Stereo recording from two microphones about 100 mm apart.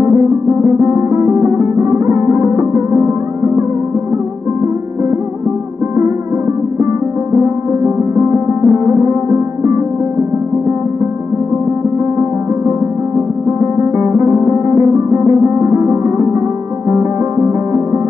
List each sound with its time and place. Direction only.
0.1 s music: 30° right (ahead or behind)
7.4 s music: 30° right (ahead or behind)
13.7 s music: 30° right (ahead or behind)